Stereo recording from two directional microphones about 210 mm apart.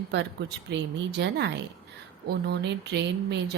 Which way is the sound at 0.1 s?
55° right (ahead or behind).